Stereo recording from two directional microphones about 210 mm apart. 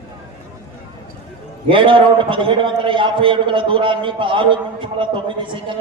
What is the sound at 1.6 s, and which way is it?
A man's voice, 25° right (ahead or behind).